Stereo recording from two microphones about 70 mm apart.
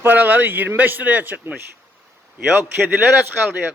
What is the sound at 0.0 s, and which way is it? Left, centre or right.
Speech, right.